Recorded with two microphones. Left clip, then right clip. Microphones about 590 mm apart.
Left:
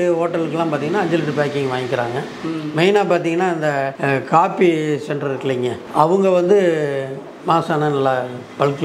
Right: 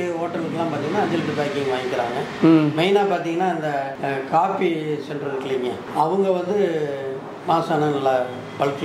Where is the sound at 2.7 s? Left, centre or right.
Left.